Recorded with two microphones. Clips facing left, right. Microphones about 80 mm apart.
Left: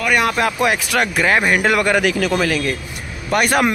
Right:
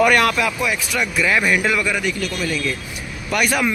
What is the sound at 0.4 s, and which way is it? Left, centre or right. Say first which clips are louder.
Speech: left 3 dB; left.